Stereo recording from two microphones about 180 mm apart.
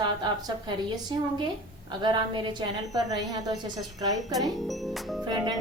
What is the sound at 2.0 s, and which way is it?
A woman's voice, 25° right (ahead or behind).